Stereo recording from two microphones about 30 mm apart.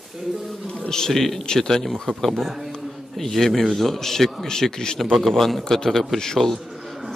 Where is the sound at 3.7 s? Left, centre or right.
Centre.